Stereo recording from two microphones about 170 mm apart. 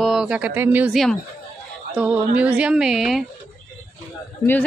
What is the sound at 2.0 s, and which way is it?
A woman's voice, 10° right (ahead or behind).